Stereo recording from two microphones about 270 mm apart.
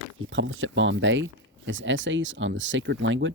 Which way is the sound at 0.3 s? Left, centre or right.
Right.